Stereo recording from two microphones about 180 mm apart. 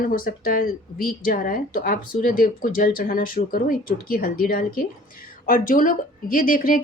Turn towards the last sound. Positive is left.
turn(degrees=50)  # may be behind; listen again after turning